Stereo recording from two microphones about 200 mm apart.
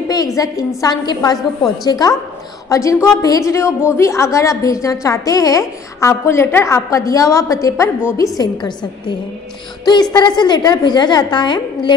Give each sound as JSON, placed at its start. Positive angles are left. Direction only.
{"t": 0.1, "sound": "a woman's voice", "side_deg": 20}
{"t": 10.1, "sound": "a woman's voice", "side_deg": 20}